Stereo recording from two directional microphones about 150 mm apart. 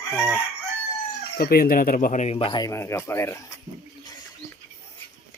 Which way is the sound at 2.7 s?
15° left (ahead or behind).